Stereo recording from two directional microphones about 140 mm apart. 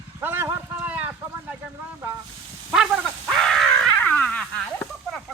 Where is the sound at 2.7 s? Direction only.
5° right (ahead or behind).